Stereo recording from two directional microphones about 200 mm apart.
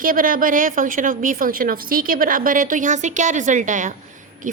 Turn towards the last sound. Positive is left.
turn(degrees=-40)  # may be behind; listen again after turning